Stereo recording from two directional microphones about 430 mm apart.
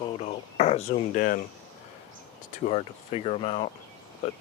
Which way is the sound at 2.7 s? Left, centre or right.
Centre.